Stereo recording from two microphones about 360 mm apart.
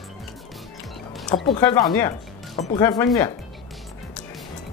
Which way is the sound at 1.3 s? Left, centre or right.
Centre.